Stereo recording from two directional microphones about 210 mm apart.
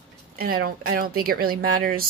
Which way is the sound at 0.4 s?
45° right (ahead or behind).